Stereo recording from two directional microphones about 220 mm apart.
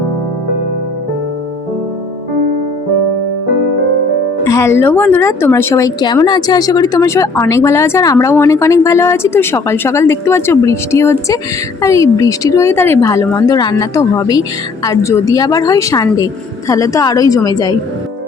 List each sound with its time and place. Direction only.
4.4 s speech: 15° left (ahead or behind)